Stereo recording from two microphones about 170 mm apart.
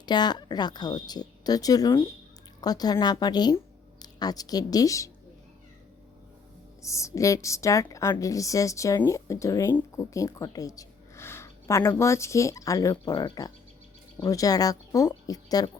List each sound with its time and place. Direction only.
0.0 s a woman's voice: 25° left (ahead or behind)
6.8 s a woman's voice: 20° left (ahead or behind)